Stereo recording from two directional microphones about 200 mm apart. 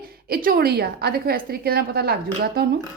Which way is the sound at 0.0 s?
50° right (ahead or behind).